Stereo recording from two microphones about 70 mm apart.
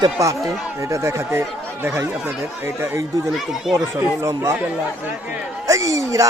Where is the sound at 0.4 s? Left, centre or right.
Right.